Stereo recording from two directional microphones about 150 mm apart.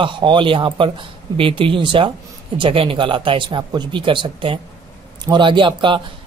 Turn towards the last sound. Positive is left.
turn(degrees=-35)  # may be behind; listen again after turning